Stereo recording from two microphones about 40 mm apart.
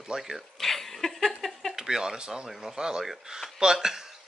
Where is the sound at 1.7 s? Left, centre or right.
Centre.